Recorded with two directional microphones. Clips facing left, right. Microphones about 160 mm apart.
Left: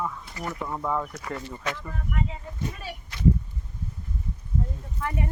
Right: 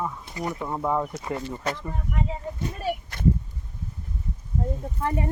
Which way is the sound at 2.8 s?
50° right (ahead or behind).